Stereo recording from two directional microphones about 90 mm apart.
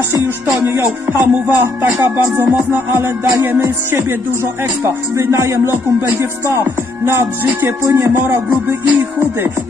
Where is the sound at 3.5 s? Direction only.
25° right (ahead or behind).